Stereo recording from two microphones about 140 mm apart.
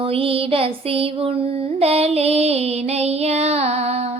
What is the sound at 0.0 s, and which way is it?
Child singing, 40° right (ahead or behind).